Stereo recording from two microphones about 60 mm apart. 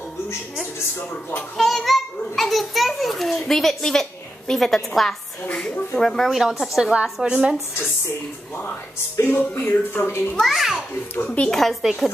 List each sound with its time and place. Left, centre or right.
1.6 s a child's voice: centre
6.8 s a woman's voice: centre
9.3 s speech: left
10.4 s a child's voice: centre
11.2 s speech: centre
11.8 s a child's voice: centre